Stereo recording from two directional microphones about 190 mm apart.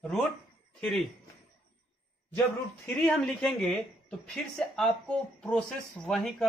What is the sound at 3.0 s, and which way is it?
Speech, centre (ahead or behind).